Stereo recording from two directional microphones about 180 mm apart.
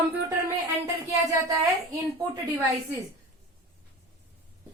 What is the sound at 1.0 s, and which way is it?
Speech, 15° right (ahead or behind).